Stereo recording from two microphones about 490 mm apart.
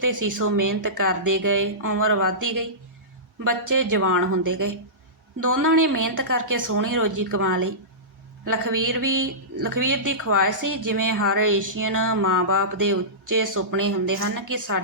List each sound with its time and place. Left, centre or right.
0.0 s speech: right